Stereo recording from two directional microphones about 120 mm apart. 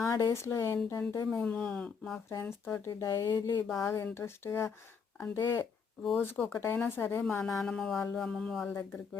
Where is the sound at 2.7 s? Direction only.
25° left (ahead or behind).